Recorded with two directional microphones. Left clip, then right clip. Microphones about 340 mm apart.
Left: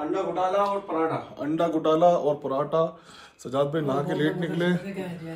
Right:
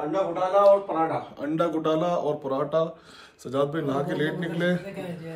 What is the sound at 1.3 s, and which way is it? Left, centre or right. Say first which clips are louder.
A man's voice: left 1 dB; centre.